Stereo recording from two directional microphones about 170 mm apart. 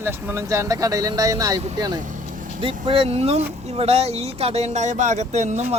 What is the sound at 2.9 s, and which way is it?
Speech, 35° right (ahead or behind).